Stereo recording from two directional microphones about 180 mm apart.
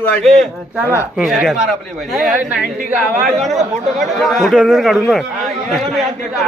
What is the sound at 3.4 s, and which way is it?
Speech, 40° right (ahead or behind).